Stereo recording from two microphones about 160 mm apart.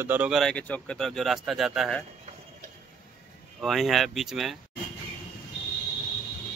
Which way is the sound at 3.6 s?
Centre (ahead or behind).